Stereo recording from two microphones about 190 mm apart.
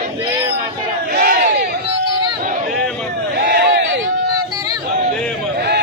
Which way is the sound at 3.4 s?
60° right (ahead or behind).